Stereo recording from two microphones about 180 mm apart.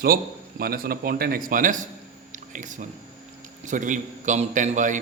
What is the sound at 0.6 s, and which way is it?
A man's voice, 55° right (ahead or behind).